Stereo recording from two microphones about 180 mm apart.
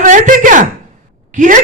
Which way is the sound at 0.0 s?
45° right (ahead or behind).